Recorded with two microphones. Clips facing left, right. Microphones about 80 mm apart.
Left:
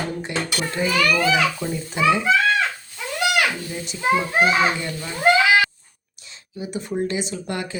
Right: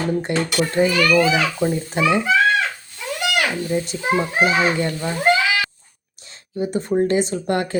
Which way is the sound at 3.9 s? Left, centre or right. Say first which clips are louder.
Left 1 dB; right.